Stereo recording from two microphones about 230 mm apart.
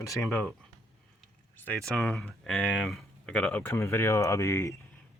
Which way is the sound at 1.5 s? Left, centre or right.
Centre.